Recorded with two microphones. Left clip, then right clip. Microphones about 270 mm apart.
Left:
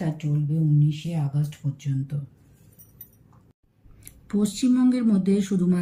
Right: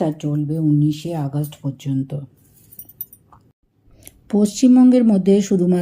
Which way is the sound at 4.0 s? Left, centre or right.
Centre.